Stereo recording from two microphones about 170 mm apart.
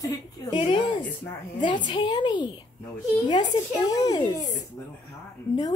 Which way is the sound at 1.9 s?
25° left (ahead or behind).